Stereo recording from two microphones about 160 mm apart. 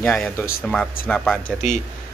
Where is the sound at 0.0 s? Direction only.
5° left (ahead or behind).